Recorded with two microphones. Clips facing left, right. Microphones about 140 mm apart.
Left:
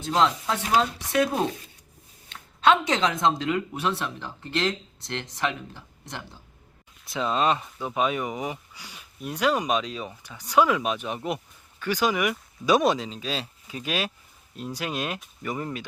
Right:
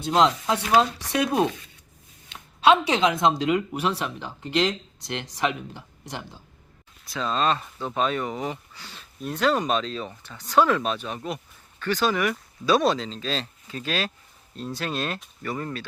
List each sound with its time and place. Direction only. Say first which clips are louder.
0.0 s speech: right 2 dB; 15° right (ahead or behind)
2.3 s speech: right 2 dB; 15° right (ahead or behind)
7.0 s speech: left 1 dB; 20° left (ahead or behind)